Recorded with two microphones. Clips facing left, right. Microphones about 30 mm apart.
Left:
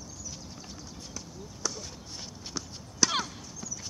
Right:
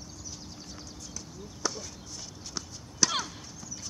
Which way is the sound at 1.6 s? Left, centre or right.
Centre.